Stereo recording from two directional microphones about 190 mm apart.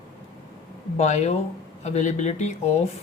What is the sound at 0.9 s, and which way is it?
A man's voice, 35° left (ahead or behind).